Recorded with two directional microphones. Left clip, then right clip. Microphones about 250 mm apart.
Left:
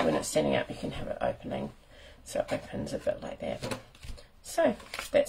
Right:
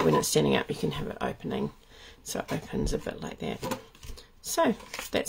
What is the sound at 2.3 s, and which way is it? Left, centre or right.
Speech, right.